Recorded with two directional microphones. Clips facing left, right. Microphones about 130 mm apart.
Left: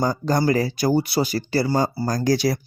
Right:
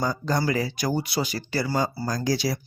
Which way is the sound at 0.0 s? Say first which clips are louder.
Left 5 dB; 35° left (ahead or behind).